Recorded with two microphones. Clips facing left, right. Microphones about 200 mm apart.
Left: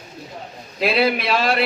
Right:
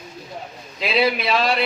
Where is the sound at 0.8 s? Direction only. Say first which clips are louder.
Left 2 dB; 55° left (ahead or behind).